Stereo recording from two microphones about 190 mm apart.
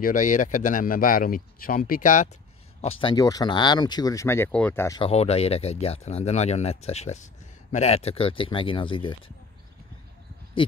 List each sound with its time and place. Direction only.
0.0 s speech: 40° left (ahead or behind)
2.8 s speech: 30° left (ahead or behind)
5.0 s speech: 35° left (ahead or behind)